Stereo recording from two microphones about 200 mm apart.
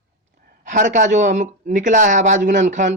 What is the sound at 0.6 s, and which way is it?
Speech, 40° right (ahead or behind).